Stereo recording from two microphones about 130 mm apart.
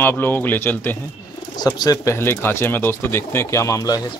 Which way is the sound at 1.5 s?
30° left (ahead or behind).